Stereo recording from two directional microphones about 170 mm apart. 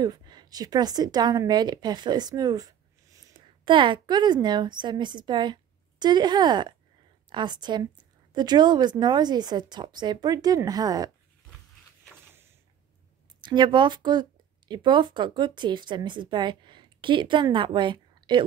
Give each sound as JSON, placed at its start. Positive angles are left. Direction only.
{"t": 0.0, "sound": "a woman's voice", "side_deg": -25}
{"t": 13.4, "sound": "a woman's voice", "side_deg": -25}